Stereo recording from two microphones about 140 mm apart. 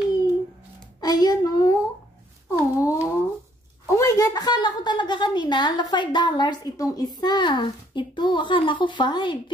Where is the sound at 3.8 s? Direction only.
20° left (ahead or behind).